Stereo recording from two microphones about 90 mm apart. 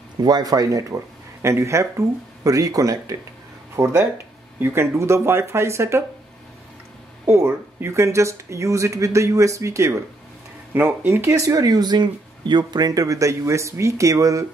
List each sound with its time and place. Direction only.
0.2 s speech: 50° right (ahead or behind); by 6.0 s 30° right (ahead or behind)
7.2 s speech: 30° right (ahead or behind)
10.7 s speech: 20° right (ahead or behind); by 14.4 s 35° right (ahead or behind)